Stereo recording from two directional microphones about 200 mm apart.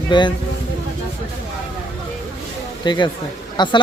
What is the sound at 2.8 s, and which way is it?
Speech, 20° left (ahead or behind).